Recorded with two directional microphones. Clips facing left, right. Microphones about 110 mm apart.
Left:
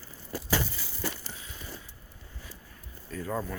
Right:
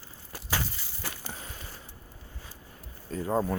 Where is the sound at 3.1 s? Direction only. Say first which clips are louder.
Right 5 dB; 30° right (ahead or behind).